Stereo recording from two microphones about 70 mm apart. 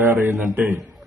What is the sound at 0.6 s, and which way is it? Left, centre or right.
Speech, right.